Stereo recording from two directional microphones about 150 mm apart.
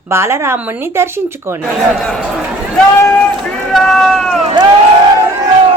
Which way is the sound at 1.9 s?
5° left (ahead or behind).